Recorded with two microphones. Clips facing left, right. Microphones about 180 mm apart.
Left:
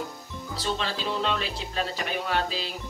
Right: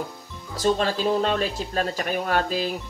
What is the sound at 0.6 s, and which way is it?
Speech, 45° right (ahead or behind).